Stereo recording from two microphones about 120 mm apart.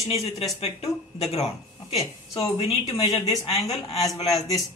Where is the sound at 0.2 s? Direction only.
60° left (ahead or behind).